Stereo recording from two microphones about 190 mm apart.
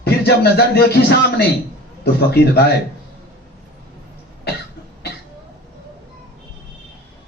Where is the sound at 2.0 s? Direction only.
60° left (ahead or behind).